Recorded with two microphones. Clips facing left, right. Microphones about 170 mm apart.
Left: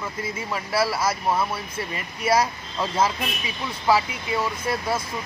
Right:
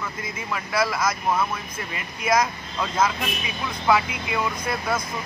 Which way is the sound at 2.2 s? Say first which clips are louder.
Even; 30° left (ahead or behind).